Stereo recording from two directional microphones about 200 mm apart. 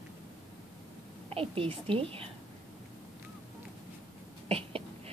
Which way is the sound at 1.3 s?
30° right (ahead or behind).